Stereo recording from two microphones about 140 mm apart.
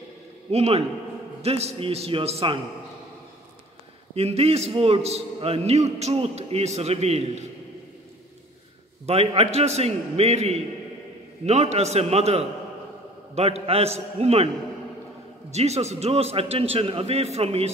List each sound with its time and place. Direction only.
0.5 s a man's voice: 45° right (ahead or behind)
4.1 s a man's voice: 45° right (ahead or behind)
9.0 s a man's voice: 45° right (ahead or behind)
15.5 s a man's voice: 50° right (ahead or behind)